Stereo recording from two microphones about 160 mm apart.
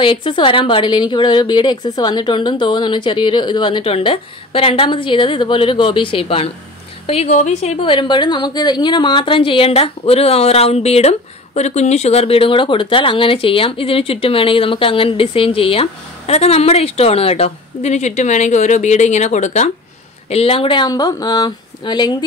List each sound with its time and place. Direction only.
0.0 s a woman's voice: 30° left (ahead or behind)